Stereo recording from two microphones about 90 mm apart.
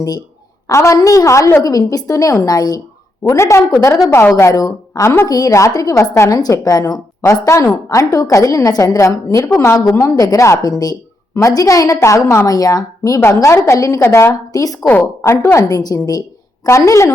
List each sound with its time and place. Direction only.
0.7 s a woman's voice: 35° left (ahead or behind)
3.2 s a woman's voice: 30° left (ahead or behind)
3.8 s a woman's voice: 40° left (ahead or behind)
6.4 s a woman's voice: 45° left (ahead or behind)
14.0 s a woman's voice: 25° left (ahead or behind)
15.2 s a woman's voice: 30° left (ahead or behind)
15.6 s a woman's voice: 45° left (ahead or behind)